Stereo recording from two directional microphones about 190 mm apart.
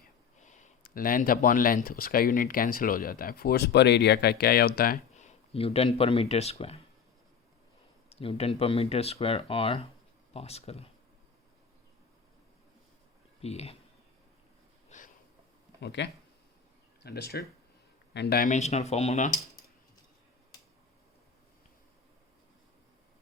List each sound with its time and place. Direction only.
0.4 s a sound: 40° left (ahead or behind)
0.8 s speech: 50° left (ahead or behind); by 6.8 s 30° left (ahead or behind)
8.1 s speech: 30° left (ahead or behind)
13.4 s speech: 35° left (ahead or behind)
14.8 s a sound: 40° left (ahead or behind)
15.8 s speech: 65° left (ahead or behind); by 19.3 s 35° left (ahead or behind)